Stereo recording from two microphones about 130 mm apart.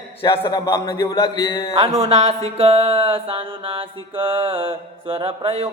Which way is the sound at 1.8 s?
55° right (ahead or behind).